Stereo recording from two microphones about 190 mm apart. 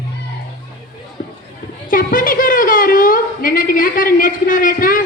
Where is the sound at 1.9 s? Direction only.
45° left (ahead or behind).